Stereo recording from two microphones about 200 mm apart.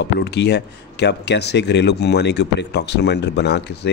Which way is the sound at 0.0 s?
55° left (ahead or behind).